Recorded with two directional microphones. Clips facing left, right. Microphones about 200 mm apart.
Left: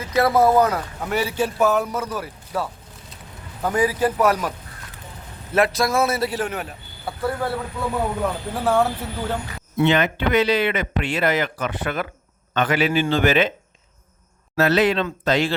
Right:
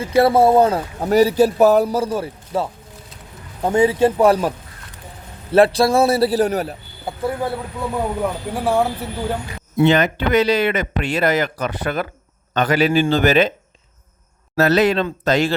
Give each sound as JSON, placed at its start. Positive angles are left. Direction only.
{"t": 0.0, "sound": "speech", "side_deg": -30}
{"t": 7.0, "sound": "speech", "side_deg": -15}
{"t": 9.8, "sound": "speech", "side_deg": -40}
{"t": 14.5, "sound": "speech", "side_deg": -40}